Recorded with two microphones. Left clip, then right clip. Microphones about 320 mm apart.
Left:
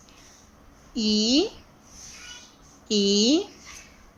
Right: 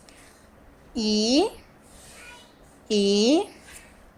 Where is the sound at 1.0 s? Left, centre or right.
Right.